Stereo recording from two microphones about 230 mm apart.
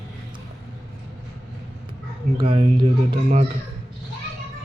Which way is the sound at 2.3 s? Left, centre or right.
Right.